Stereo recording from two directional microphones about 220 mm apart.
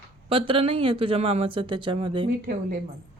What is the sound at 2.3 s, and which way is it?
Speech, 40° right (ahead or behind).